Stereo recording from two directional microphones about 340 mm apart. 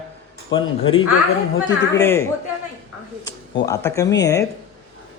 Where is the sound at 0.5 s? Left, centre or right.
Left.